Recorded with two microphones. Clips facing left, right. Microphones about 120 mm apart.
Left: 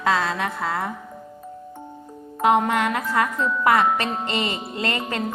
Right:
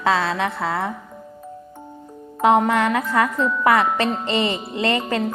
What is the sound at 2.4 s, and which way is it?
A woman's voice, 30° right (ahead or behind).